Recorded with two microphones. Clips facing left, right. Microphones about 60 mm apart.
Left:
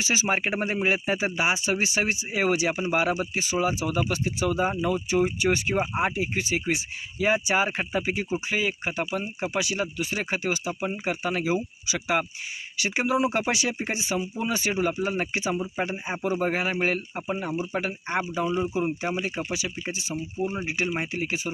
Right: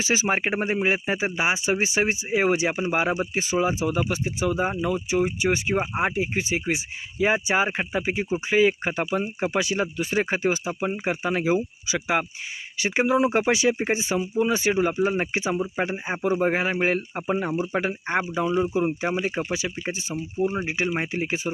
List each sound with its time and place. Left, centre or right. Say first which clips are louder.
0.0 s speech: right 2 dB; right
3.8 s speech: right 1 dB; centre
4.7 s speech: even; centre; by 8.5 s right
8.5 s speech: right 9 dB; right
20.4 s speech: right 5 dB; right
20.9 s speech: right 2 dB; right